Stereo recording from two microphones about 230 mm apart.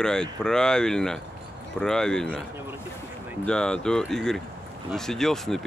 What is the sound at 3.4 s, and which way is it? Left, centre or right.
Speech, centre.